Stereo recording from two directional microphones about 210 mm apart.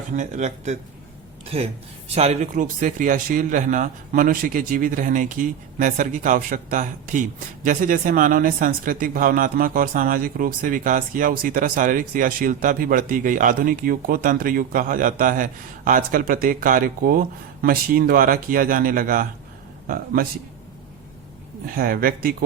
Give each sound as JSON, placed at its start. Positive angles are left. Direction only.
{"t": 0.2, "sound": "speech", "side_deg": -35}
{"t": 21.8, "sound": "speech", "side_deg": -45}